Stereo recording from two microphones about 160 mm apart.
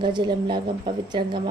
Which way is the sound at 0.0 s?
30° right (ahead or behind).